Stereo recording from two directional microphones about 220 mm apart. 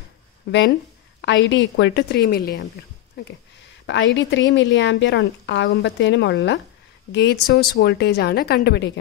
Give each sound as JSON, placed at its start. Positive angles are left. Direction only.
{"t": 1.2, "sound": "a woman's voice", "side_deg": 55}